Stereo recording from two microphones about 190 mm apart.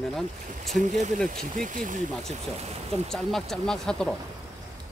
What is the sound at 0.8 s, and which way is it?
Speech, 40° right (ahead or behind).